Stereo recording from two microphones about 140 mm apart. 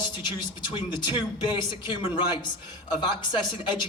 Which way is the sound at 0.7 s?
35° left (ahead or behind).